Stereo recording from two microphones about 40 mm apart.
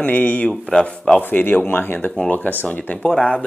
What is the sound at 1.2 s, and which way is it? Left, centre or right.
Speech, left.